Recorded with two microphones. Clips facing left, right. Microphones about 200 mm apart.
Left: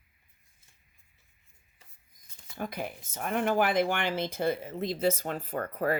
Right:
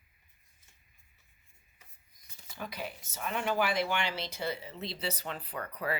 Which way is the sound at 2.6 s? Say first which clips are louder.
Left 5 dB; 50° left (ahead or behind).